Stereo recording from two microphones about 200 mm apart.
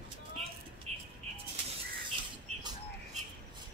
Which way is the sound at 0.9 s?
35° right (ahead or behind).